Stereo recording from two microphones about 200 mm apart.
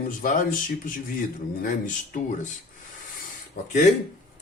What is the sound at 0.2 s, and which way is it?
Speech, 40° left (ahead or behind).